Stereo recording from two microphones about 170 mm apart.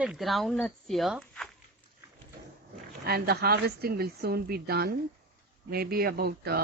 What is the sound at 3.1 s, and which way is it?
Speech, 70° right (ahead or behind).